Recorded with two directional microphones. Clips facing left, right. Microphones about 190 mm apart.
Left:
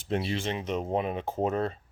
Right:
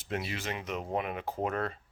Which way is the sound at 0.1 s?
30° left (ahead or behind).